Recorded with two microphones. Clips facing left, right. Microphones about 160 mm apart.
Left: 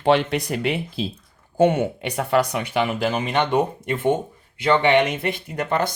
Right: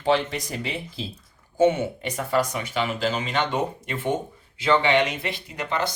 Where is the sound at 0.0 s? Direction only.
60° left (ahead or behind).